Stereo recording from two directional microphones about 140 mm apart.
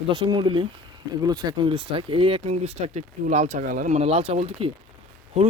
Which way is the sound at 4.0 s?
45° right (ahead or behind).